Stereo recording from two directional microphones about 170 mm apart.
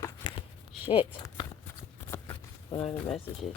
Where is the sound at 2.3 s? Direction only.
35° left (ahead or behind).